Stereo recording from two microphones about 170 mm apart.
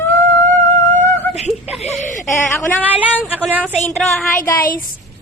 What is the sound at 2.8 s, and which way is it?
Speech, 10° right (ahead or behind).